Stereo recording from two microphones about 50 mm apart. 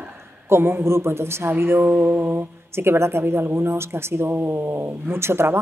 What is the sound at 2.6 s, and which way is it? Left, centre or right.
Speech, right.